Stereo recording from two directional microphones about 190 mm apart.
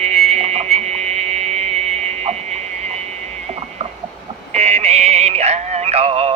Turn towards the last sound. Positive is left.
turn(degrees=-35)  # may be behind; listen again after turning